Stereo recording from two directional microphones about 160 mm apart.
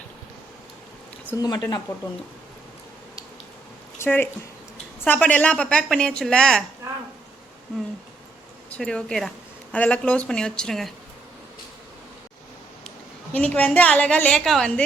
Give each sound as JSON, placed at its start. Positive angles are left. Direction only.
{"t": 1.4, "sound": "speech", "side_deg": 25}
{"t": 3.9, "sound": "a woman's voice", "side_deg": 15}
{"t": 8.7, "sound": "a woman's voice", "side_deg": 5}
{"t": 13.3, "sound": "a woman's voice", "side_deg": 10}